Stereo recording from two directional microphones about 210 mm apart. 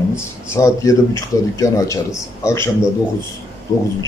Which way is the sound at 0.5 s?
15° left (ahead or behind).